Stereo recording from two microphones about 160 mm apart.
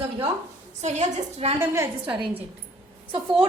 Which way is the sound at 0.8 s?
45° right (ahead or behind).